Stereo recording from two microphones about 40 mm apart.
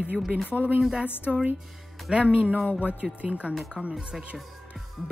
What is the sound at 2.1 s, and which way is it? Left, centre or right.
Speech, right.